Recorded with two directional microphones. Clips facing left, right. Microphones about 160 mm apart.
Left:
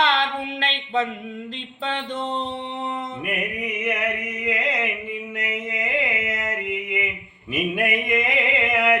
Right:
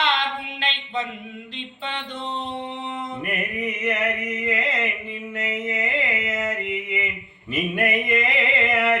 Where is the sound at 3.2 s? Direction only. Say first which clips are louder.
Right 3 dB; 15° left (ahead or behind).